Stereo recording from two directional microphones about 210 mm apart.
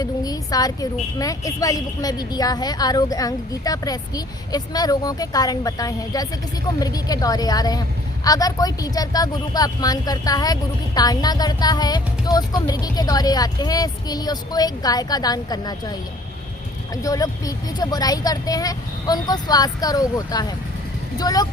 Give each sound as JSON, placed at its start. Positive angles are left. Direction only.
{"t": 0.0, "sound": "a woman's voice", "side_deg": 15}